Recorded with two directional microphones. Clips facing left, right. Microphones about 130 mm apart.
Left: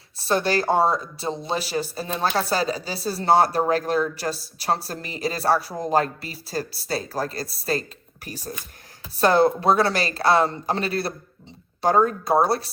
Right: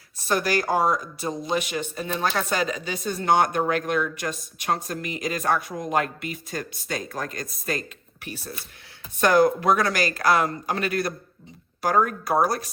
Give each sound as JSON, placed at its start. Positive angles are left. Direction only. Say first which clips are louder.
{"t": 0.2, "sound": "speech", "louder": "left 2 dB", "side_deg": 30}
{"t": 9.1, "sound": "speech", "louder": "left 1 dB", "side_deg": 30}